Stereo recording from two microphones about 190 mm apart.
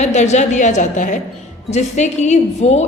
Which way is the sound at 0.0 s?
35° left (ahead or behind).